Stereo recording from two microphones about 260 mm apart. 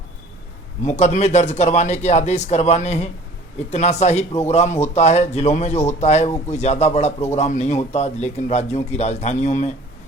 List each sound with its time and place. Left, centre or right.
0.9 s speech: left